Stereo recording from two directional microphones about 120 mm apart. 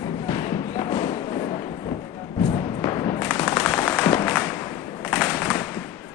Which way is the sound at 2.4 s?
50° left (ahead or behind).